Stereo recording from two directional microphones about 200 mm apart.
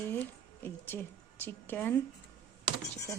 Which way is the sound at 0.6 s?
10° left (ahead or behind).